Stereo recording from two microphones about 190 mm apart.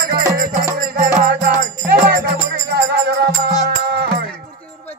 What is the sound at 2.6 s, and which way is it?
Music, 60° right (ahead or behind).